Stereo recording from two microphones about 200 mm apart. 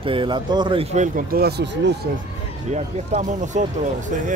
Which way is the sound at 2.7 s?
35° right (ahead or behind).